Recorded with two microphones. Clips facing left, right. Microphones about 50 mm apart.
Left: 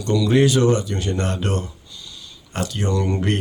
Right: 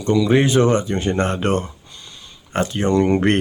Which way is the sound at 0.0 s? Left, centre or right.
Right.